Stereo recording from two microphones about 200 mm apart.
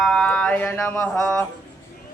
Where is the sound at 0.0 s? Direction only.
5° left (ahead or behind).